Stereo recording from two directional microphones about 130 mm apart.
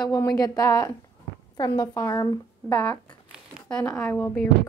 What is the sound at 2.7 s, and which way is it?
Speech, 10° left (ahead or behind).